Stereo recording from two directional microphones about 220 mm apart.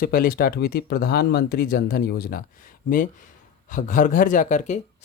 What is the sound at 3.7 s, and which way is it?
Speech, 35° left (ahead or behind).